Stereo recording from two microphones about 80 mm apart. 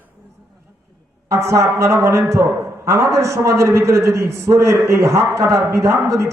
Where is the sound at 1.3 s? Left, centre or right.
Right.